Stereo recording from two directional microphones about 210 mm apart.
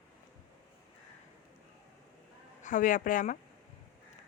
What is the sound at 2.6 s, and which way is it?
Speech, 40° left (ahead or behind).